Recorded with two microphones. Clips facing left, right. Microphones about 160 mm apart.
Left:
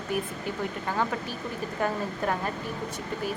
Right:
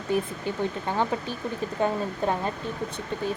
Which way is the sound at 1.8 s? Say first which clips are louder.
Right 3 dB; 25° right (ahead or behind).